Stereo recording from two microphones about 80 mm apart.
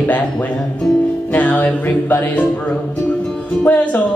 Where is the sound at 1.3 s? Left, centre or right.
Centre.